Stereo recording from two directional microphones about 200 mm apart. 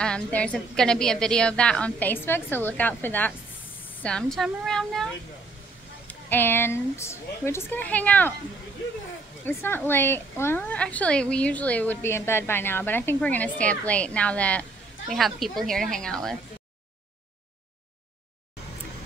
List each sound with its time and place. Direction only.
0.0 s a woman's voice: 5° left (ahead or behind)
9.4 s a woman's voice: 10° left (ahead or behind)